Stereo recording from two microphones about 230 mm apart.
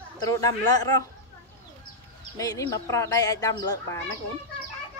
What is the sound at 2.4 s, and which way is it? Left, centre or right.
Speech, centre.